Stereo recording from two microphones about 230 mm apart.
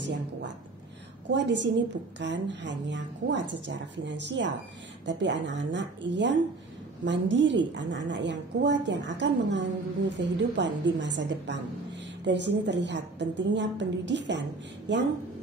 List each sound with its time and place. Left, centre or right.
0.0 s a woman's voice: right